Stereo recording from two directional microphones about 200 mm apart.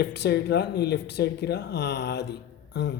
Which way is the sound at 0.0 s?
55° left (ahead or behind).